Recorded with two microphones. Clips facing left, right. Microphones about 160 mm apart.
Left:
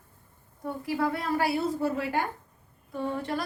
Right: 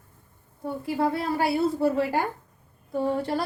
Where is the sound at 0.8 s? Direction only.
30° right (ahead or behind).